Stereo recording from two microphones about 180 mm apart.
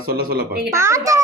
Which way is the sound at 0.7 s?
15° right (ahead or behind).